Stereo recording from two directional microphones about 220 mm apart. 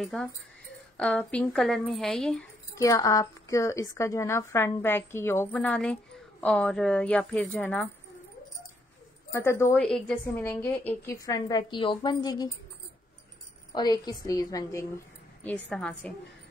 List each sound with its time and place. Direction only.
0.0 s a woman's voice: centre (ahead or behind)
2.7 s a woman's voice: 15° left (ahead or behind)
9.3 s a woman's voice: 10° left (ahead or behind)
13.7 s a woman's voice: 20° left (ahead or behind)
15.4 s a woman's voice: 5° left (ahead or behind)